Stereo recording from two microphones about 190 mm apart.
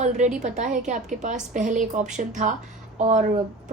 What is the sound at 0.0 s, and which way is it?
A woman's voice, 40° right (ahead or behind).